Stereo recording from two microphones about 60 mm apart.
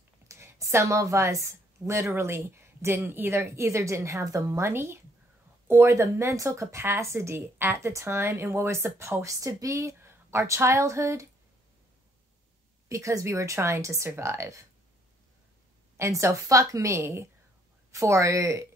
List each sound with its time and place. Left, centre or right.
0.3 s a woman's voice: right
9.2 s a woman's voice: right
12.8 s a woman's voice: right
16.0 s a woman's voice: right
17.9 s a woman's voice: right